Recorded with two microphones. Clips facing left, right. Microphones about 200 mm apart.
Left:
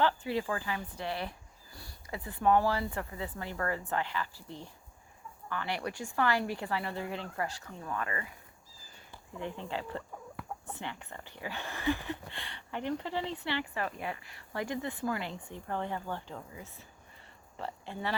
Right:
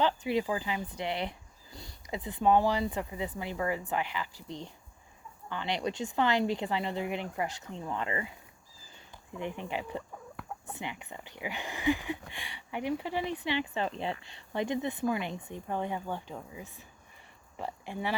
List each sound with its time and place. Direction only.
0.0 s speech: 15° right (ahead or behind)
9.4 s speech: 15° right (ahead or behind)